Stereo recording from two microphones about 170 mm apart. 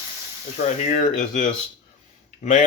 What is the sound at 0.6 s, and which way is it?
Speech, 45° left (ahead or behind).